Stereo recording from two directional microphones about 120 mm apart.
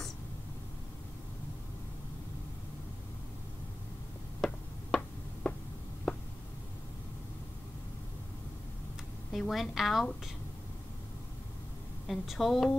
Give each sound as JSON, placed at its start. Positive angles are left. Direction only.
{"t": 4.4, "sound": "a sound", "side_deg": 0}
{"t": 9.3, "sound": "a woman's voice", "side_deg": 0}
{"t": 12.1, "sound": "a woman's voice", "side_deg": 0}